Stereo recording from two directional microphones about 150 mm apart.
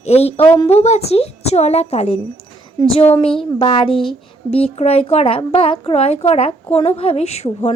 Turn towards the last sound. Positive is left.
turn(degrees=45)  # may be behind; listen again after turning